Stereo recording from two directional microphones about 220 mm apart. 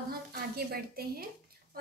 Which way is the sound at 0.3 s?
45° right (ahead or behind).